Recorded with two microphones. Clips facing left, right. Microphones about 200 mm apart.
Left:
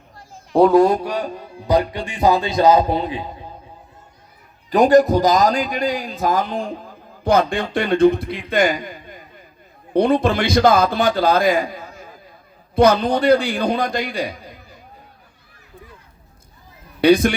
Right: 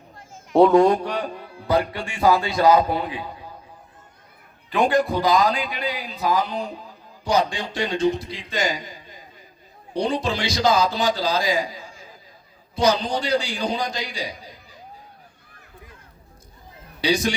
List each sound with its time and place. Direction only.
0.5 s a man's voice: centre (ahead or behind); by 3.5 s 25° left (ahead or behind)
4.7 s a man's voice: 40° left (ahead or behind)
17.0 s a man's voice: 55° left (ahead or behind)